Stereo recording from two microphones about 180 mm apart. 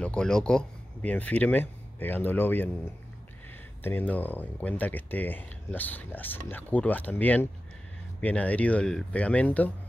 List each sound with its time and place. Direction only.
0.0 s speech: 5° left (ahead or behind)